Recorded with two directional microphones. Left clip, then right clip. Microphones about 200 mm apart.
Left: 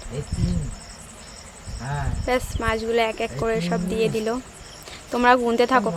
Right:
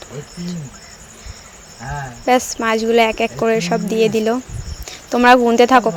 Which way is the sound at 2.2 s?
30° right (ahead or behind).